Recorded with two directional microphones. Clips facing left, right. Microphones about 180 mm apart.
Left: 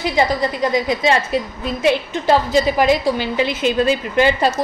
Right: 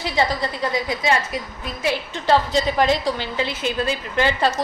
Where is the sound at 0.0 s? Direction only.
15° left (ahead or behind).